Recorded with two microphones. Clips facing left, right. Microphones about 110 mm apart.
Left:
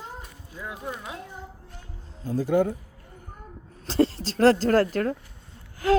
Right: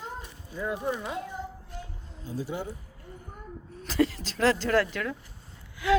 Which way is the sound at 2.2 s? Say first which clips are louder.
Left 11 dB; 50° left (ahead or behind).